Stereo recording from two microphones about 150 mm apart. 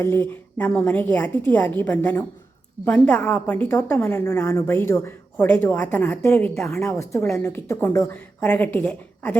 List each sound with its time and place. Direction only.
0.0 s a woman's voice: 15° left (ahead or behind)
6.9 s a woman's voice: 20° left (ahead or behind)